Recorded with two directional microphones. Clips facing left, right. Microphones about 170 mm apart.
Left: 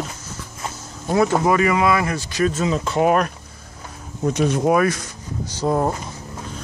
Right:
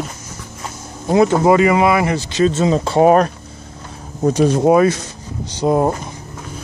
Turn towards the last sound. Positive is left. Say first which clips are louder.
# right 5 dB
turn(degrees=-20)  # may be behind; listen again after turning